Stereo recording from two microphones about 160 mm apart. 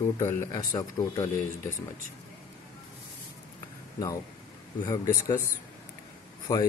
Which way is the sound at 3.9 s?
20° left (ahead or behind).